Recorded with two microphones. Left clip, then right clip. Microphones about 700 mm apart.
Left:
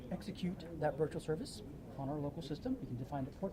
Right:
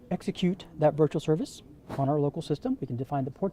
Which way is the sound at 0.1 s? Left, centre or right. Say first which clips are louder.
Right 15 dB; right.